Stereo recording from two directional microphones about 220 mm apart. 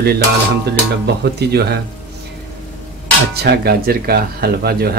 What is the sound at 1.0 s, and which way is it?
Speech, 50° right (ahead or behind).